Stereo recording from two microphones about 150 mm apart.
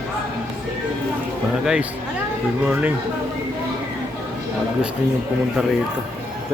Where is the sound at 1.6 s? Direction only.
5° right (ahead or behind).